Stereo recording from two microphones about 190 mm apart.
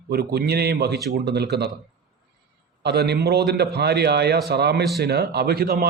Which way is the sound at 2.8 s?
60° right (ahead or behind).